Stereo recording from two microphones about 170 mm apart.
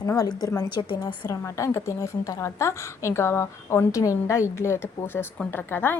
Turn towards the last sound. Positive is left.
turn(degrees=10)  # may be behind; listen again after turning